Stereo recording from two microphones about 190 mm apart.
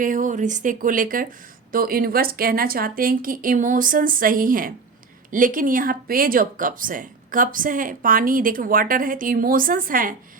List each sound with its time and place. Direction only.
0.0 s speech: 45° right (ahead or behind)